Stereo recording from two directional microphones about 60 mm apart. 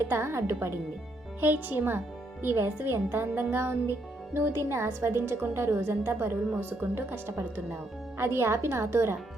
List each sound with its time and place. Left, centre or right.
0.0 s speech: right
1.4 s a woman's voice: right